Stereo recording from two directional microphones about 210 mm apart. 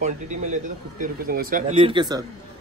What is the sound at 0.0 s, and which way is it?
Speech, 35° right (ahead or behind).